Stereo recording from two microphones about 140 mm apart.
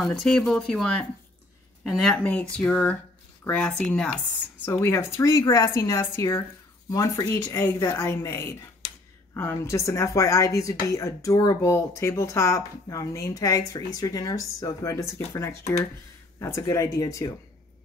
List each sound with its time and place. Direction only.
0.0 s speech: 5° left (ahead or behind)
4.6 s a woman's voice: 15° left (ahead or behind)